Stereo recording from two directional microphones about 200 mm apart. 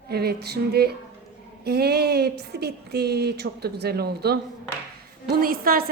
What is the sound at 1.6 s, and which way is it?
Speech, 55° right (ahead or behind).